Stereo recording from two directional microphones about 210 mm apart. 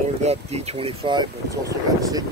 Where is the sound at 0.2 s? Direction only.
30° right (ahead or behind).